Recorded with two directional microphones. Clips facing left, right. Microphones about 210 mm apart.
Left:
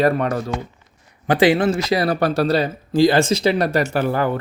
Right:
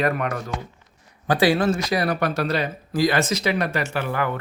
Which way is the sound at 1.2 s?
20° left (ahead or behind).